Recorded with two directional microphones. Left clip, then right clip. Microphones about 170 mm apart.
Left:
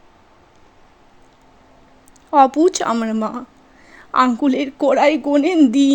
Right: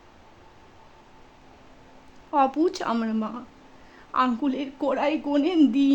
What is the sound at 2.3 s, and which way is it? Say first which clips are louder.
A woman's voice: left 9 dB; 30° left (ahead or behind).